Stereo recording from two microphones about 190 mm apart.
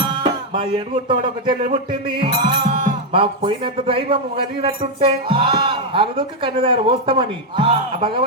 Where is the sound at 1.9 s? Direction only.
25° right (ahead or behind).